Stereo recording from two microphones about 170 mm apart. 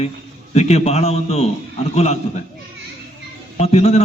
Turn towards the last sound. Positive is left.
turn(degrees=40)  # may be behind; listen again after turning